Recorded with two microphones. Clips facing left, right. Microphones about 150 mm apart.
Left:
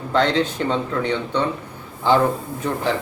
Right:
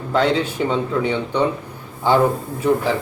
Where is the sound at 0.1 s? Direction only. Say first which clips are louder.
Right 1 dB; 5° right (ahead or behind).